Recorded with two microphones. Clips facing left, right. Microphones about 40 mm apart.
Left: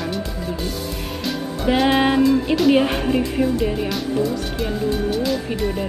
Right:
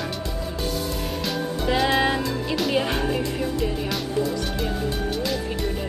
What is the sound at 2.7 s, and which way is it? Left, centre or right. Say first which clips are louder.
Speech: left 5 dB; centre.